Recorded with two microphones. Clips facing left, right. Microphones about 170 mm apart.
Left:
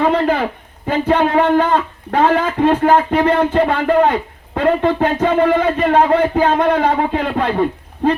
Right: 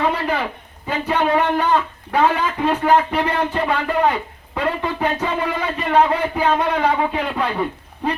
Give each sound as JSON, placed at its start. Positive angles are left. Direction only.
{"t": 0.0, "sound": "speech", "side_deg": 50}